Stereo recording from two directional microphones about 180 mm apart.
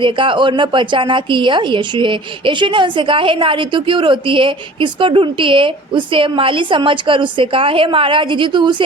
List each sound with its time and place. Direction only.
0.0 s a woman's voice: 30° right (ahead or behind)